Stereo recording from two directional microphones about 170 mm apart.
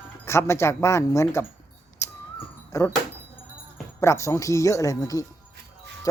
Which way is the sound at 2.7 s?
20° left (ahead or behind).